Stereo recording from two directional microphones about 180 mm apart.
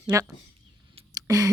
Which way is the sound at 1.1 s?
20° right (ahead or behind).